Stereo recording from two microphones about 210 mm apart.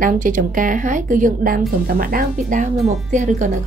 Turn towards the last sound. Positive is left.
turn(degrees=-35)  # may be behind; listen again after turning